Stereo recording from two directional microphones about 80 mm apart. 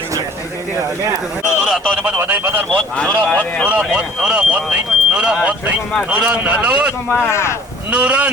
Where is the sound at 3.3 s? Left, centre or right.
Centre.